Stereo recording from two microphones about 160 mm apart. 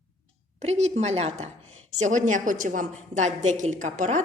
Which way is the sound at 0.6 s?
45° right (ahead or behind).